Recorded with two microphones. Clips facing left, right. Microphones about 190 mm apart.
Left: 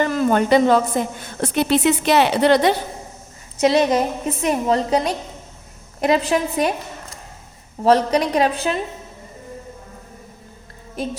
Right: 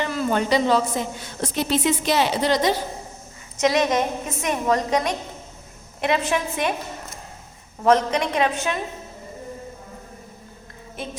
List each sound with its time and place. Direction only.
0.0 s a woman's voice: 50° left (ahead or behind)
3.6 s a woman's voice: 30° left (ahead or behind)
7.9 s a woman's voice: 35° left (ahead or behind)